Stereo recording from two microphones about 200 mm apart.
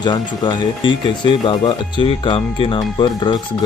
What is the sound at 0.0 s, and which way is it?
Speech, 20° left (ahead or behind).